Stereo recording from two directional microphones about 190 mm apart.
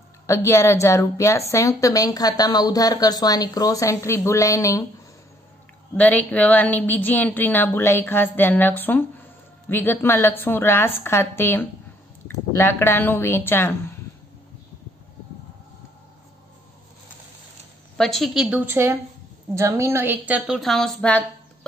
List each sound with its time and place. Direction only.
0.3 s speech: 15° left (ahead or behind)
5.9 s speech: 10° left (ahead or behind)
17.9 s a woman's voice: centre (ahead or behind)